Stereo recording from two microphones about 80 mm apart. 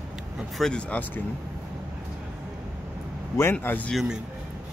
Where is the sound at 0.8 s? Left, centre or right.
Left.